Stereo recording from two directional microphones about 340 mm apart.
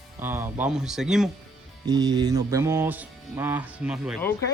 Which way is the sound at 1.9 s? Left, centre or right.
Centre.